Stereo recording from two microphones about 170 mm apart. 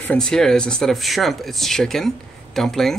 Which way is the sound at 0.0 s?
5° left (ahead or behind).